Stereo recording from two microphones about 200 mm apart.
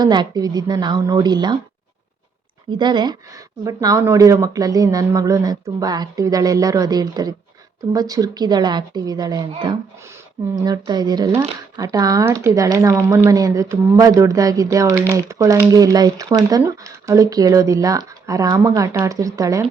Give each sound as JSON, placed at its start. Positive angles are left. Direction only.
{"t": 0.0, "sound": "a woman's voice", "side_deg": -20}
{"t": 2.6, "sound": "a woman's voice", "side_deg": -20}